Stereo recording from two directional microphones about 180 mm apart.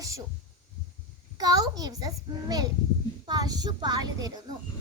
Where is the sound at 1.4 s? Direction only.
20° right (ahead or behind).